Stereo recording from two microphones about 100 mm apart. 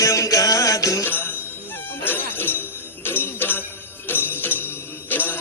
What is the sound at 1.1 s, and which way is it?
Jingle bell, 20° left (ahead or behind).